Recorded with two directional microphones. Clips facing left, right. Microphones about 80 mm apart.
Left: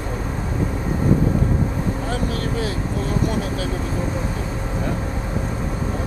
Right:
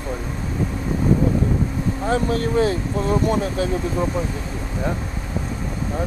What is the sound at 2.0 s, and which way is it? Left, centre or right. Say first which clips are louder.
Speech: right 4 dB; right.